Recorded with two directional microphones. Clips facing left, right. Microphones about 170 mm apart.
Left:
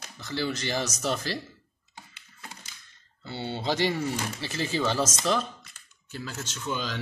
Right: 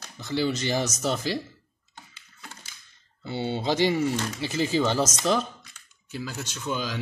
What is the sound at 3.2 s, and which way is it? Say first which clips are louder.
Speech: right 4 dB; 15° right (ahead or behind).